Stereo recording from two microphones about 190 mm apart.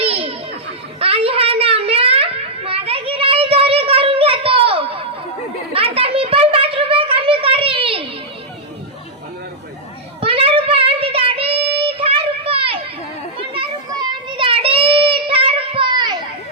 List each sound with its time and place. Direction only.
0.0 s music: 30° right (ahead or behind)
0.9 s a sound: 30° right (ahead or behind)
10.2 s child singing: 30° right (ahead or behind)